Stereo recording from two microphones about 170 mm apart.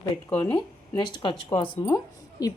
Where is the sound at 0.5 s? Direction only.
25° left (ahead or behind).